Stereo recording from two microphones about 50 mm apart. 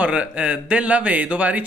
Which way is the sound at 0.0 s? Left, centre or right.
Right.